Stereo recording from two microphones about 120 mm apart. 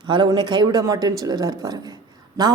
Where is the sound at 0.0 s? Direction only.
40° right (ahead or behind).